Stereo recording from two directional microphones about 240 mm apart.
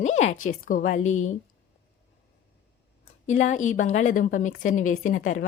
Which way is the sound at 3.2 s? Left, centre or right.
Left.